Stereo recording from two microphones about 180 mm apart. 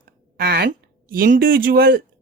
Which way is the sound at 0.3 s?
60° right (ahead or behind).